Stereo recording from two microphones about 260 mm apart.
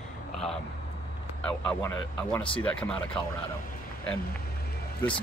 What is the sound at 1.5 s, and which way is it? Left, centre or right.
Speech, centre.